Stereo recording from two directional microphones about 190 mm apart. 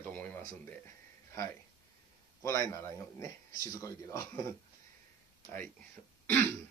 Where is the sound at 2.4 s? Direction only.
15° left (ahead or behind).